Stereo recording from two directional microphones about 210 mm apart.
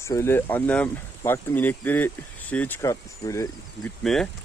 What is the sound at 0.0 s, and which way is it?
A man's voice, 10° left (ahead or behind).